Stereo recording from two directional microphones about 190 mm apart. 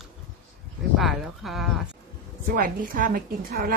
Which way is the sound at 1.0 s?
Centre (ahead or behind).